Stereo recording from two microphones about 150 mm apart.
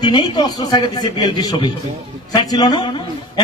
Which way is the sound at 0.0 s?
30° left (ahead or behind).